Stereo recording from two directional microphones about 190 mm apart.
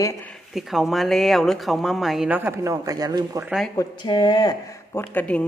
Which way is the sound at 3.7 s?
25° left (ahead or behind).